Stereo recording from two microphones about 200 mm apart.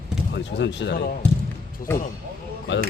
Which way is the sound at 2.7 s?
65° left (ahead or behind).